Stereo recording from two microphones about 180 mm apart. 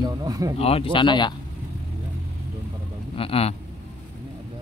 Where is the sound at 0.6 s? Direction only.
35° left (ahead or behind).